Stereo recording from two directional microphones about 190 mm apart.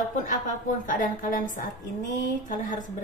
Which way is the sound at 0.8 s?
45° left (ahead or behind).